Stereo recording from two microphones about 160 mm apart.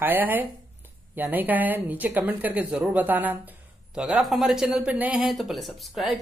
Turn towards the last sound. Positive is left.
turn(degrees=0)  # may be behind; listen again after turning